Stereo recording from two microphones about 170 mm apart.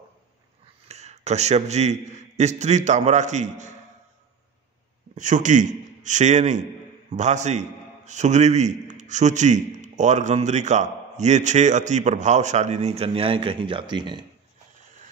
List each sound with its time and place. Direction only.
0.8 s a man's voice: 40° right (ahead or behind)
5.1 s a man's voice: 50° right (ahead or behind); by 14.2 s 25° right (ahead or behind)